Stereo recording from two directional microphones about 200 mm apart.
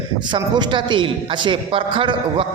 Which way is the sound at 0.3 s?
20° right (ahead or behind).